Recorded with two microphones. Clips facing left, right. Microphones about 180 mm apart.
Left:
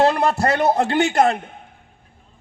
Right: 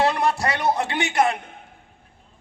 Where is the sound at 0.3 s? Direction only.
40° left (ahead or behind).